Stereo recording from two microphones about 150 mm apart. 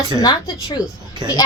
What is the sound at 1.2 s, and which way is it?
Speech, 30° right (ahead or behind).